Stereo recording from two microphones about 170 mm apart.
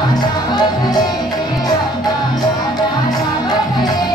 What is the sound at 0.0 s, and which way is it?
Music, 25° left (ahead or behind).